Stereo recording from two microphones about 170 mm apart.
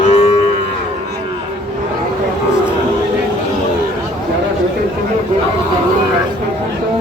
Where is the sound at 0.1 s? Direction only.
40° left (ahead or behind).